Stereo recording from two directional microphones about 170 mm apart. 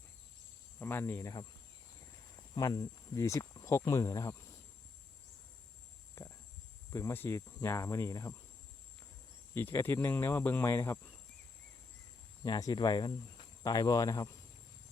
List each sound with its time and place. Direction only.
0.8 s speech: 15° left (ahead or behind)
2.6 s speech: 25° left (ahead or behind)
6.2 s a sound: 15° left (ahead or behind)
6.9 s speech: 15° left (ahead or behind)
9.6 s speech: 10° left (ahead or behind)
12.4 s speech: 20° left (ahead or behind)